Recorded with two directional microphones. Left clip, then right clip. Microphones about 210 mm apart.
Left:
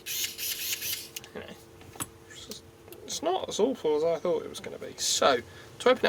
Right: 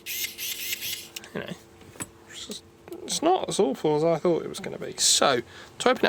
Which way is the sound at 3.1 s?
50° right (ahead or behind).